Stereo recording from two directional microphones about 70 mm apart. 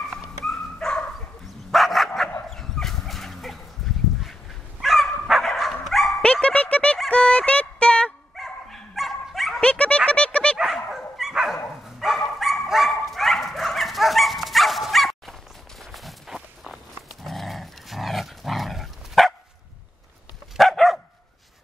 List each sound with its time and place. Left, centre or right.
0.5 s dog: centre
1.7 s dog: centre
6.2 s dog: centre
7.1 s a sound: centre
8.4 s dog: centre
9.6 s a sound: centre
10.6 s dog: centre
20.5 s dog: centre